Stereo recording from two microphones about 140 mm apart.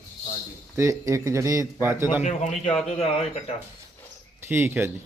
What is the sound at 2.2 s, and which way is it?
A man's voice, 55° left (ahead or behind).